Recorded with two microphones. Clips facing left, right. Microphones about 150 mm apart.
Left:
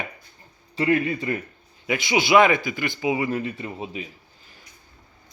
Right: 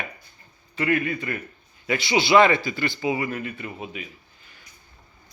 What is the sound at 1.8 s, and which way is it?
A man's voice, 15° left (ahead or behind).